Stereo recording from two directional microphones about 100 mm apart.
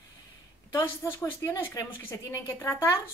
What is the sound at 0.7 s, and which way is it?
A woman's voice, 25° left (ahead or behind).